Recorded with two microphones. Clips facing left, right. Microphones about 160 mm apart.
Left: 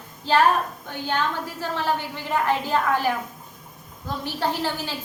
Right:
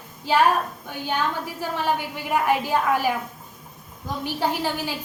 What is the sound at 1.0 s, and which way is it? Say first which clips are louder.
A woman's voice: even; 10° right (ahead or behind).